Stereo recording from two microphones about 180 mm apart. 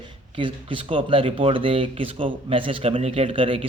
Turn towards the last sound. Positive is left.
turn(degrees=-30)  # may be behind; listen again after turning